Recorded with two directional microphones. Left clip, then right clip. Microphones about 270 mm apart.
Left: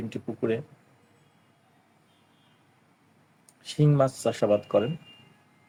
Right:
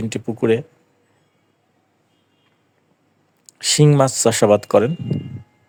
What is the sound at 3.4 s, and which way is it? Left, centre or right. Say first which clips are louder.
Speech: right 12 dB; right.